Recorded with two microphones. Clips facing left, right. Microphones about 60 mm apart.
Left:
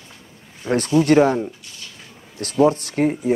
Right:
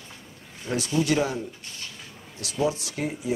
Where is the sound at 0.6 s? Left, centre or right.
Left.